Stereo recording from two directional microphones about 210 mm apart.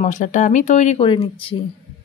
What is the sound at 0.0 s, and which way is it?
Speech, 35° left (ahead or behind).